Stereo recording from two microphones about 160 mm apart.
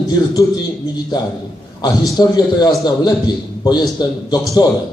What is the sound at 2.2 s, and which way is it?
A man's voice, 25° left (ahead or behind).